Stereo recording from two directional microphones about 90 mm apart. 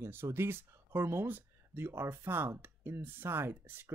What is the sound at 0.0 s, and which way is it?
Speech, 25° right (ahead or behind).